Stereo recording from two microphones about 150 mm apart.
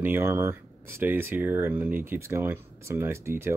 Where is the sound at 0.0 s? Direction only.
15° right (ahead or behind).